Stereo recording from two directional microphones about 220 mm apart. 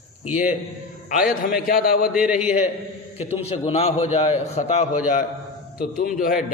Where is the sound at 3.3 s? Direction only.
30° left (ahead or behind).